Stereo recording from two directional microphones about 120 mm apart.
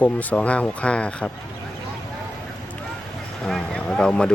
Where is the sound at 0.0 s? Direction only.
10° left (ahead or behind).